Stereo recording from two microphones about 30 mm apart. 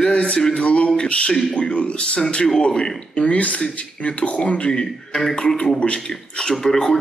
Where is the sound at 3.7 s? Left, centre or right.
Left.